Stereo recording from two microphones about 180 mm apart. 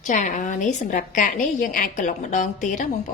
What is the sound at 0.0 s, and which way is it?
A woman's voice, 45° left (ahead or behind).